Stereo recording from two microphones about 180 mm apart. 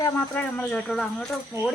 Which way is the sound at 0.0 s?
10° left (ahead or behind).